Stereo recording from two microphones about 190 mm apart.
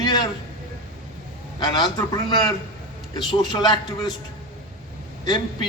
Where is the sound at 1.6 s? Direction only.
20° left (ahead or behind).